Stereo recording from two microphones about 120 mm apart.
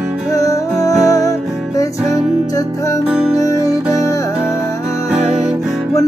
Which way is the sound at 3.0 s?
5° right (ahead or behind).